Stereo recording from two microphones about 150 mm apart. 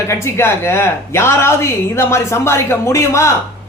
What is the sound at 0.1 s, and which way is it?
Speech, 20° left (ahead or behind).